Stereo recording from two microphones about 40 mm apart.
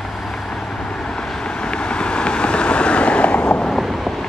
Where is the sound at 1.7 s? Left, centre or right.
Left.